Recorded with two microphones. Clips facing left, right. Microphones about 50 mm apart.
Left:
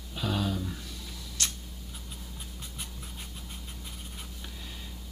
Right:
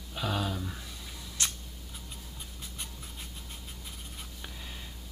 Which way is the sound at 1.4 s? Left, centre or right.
Centre.